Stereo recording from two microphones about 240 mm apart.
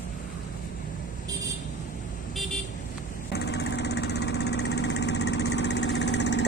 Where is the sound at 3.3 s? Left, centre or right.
Left.